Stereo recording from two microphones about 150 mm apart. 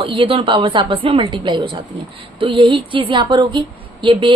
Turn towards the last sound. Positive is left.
turn(degrees=-35)  # may be behind; listen again after turning